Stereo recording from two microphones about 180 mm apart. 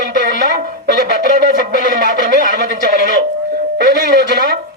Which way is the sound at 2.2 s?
65° right (ahead or behind).